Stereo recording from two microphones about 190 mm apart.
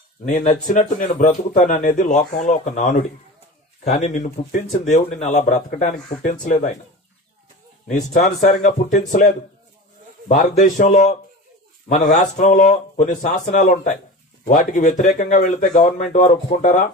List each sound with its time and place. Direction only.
0.3 s a man's voice: 45° left (ahead or behind)
8.1 s a man's voice: 40° left (ahead or behind)